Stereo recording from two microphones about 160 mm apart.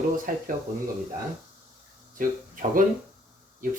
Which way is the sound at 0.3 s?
60° right (ahead or behind).